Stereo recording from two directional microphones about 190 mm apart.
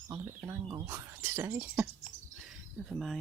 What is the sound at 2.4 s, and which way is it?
Cricket, centre (ahead or behind).